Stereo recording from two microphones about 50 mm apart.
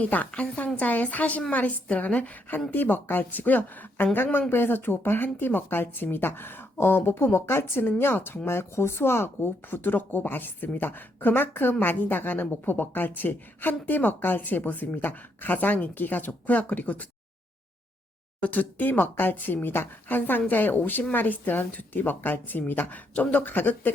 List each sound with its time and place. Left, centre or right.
0.0 s a woman's voice: left
2.7 s a woman's voice: left
18.3 s speech: left